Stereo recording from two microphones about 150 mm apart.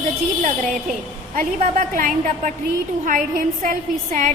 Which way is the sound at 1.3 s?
60° right (ahead or behind).